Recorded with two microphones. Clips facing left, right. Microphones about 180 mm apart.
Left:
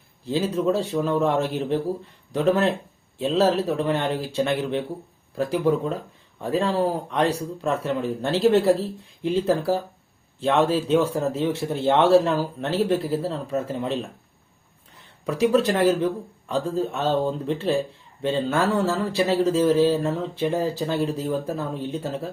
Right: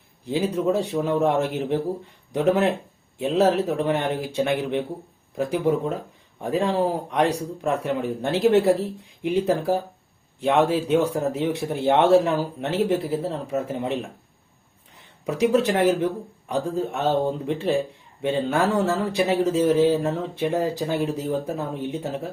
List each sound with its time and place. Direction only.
0.3 s speech: 15° right (ahead or behind)
15.3 s speech: 15° right (ahead or behind)